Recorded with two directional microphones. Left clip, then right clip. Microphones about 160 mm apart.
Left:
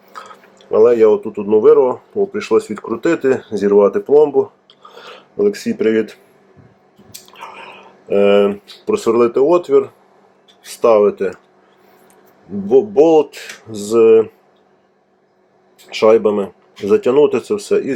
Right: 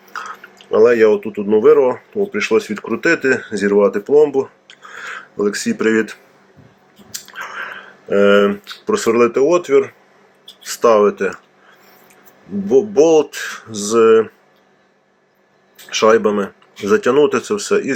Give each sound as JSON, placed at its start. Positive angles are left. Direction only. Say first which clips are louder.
{"t": 0.7, "sound": "speech", "louder": "left 1 dB", "side_deg": 5}
{"t": 7.1, "sound": "chewing", "louder": "right 5 dB", "side_deg": 10}
{"t": 8.0, "sound": "speech", "louder": "even", "side_deg": 5}
{"t": 12.6, "sound": "speech", "louder": "left 1 dB", "side_deg": 10}
{"t": 15.9, "sound": "speech", "louder": "left 1 dB", "side_deg": 10}